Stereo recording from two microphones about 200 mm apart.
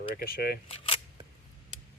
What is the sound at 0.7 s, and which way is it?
Speech, 30° left (ahead or behind).